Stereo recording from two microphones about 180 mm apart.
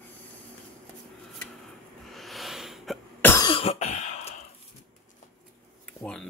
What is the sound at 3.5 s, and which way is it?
Cough, 30° left (ahead or behind).